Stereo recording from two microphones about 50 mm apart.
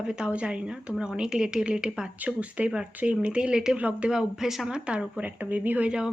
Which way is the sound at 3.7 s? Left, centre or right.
Right.